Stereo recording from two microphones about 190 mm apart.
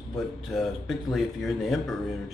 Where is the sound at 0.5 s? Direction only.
Centre (ahead or behind).